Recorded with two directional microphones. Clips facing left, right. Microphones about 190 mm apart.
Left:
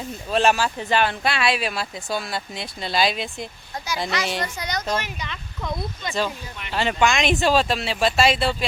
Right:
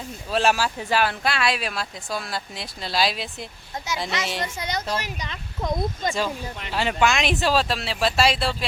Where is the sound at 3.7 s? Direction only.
20° right (ahead or behind).